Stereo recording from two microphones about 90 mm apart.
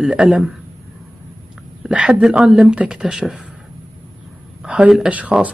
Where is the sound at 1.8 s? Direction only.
10° right (ahead or behind).